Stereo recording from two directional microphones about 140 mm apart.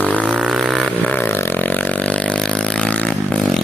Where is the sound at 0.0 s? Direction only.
10° left (ahead or behind).